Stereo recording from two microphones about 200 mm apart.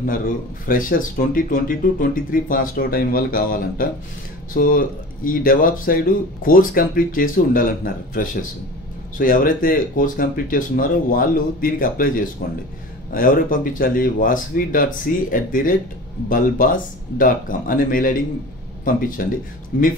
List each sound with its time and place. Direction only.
0.7 s speech: 45° left (ahead or behind)